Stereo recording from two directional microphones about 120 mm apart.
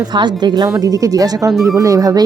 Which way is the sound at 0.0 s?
35° right (ahead or behind).